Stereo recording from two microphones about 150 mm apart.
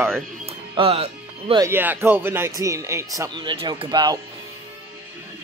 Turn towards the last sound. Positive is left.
turn(degrees=-30)  # may be behind; listen again after turning